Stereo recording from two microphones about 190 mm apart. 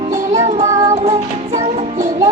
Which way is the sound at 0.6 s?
20° right (ahead or behind).